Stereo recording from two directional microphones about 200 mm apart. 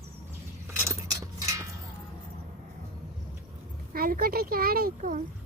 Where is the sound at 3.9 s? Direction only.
45° right (ahead or behind).